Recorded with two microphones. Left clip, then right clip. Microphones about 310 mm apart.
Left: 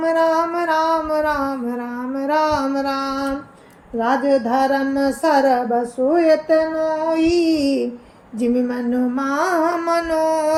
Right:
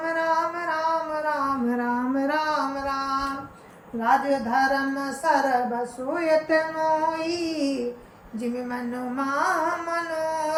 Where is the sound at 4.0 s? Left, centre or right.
Centre.